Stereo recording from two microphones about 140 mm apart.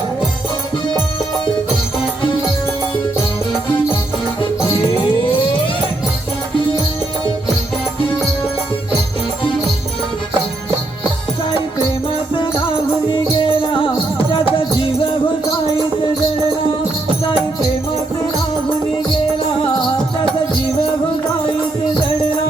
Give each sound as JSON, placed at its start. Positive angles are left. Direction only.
{"t": 12.3, "sound": "music", "side_deg": 35}